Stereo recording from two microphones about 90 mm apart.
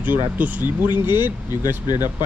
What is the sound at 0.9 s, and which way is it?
Speech, 60° left (ahead or behind).